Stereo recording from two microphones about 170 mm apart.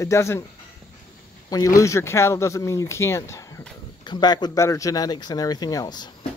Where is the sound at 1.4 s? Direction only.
20° left (ahead or behind).